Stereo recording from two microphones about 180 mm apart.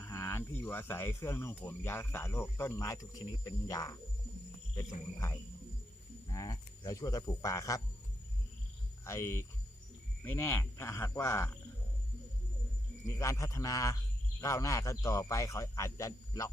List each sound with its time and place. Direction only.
0.0 s speech: 15° left (ahead or behind)
6.2 s speech: 20° left (ahead or behind)
9.0 s speech: 15° left (ahead or behind)
13.1 s speech: 15° left (ahead or behind)